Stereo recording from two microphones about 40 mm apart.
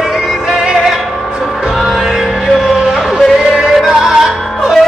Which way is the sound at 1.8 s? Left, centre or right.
Centre.